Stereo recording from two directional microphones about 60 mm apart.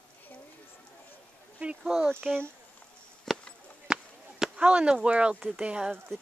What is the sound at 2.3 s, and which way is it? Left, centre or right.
Speech, centre.